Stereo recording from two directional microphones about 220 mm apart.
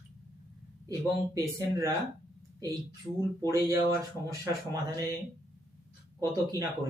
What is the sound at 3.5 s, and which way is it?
Speech, 15° right (ahead or behind).